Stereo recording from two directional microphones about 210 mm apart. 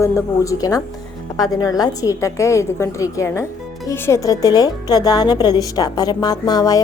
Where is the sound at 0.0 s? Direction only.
15° left (ahead or behind).